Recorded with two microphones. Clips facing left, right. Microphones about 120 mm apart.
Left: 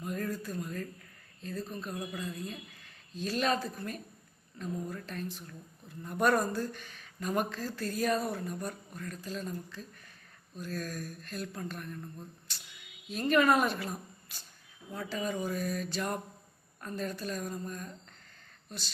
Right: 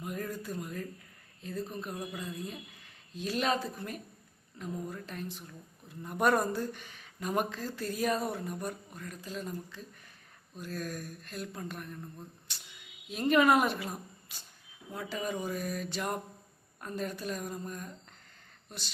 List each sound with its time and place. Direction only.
0.0 s a sound: 15° right (ahead or behind)
1.4 s speech: 15° right (ahead or behind)
13.1 s a woman's voice: 20° right (ahead or behind)